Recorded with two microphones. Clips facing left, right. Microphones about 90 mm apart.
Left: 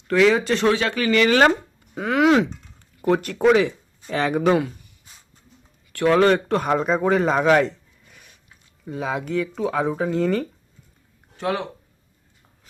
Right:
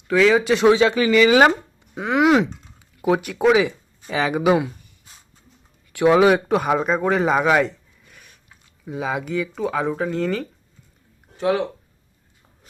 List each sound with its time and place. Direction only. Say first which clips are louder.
0.1 s speech: right 1 dB; centre (ahead or behind)
0.5 s speech: right 5 dB; 15° right (ahead or behind)
1.1 s speech: even; 5° right (ahead or behind)
5.9 s speech: right 2 dB; 15° right (ahead or behind)
8.8 s speech: right 1 dB; centre (ahead or behind)